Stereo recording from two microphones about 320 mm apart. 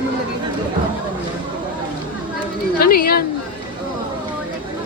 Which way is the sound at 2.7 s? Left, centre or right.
Left.